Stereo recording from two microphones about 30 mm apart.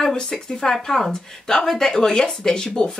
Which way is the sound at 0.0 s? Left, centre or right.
Left.